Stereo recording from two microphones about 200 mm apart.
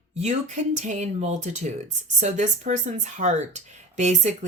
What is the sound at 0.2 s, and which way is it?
Speech, 35° right (ahead or behind).